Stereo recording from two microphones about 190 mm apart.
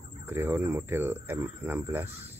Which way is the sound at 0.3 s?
10° right (ahead or behind).